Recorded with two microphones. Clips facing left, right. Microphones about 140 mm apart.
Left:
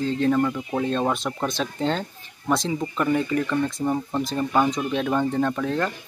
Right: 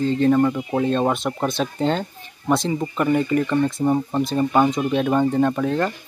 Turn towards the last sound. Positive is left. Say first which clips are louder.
# right 4 dB
turn(degrees=-10)  # may be behind; listen again after turning